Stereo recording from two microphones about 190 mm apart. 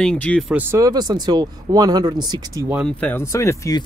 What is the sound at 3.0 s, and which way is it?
Speech, 10° left (ahead or behind).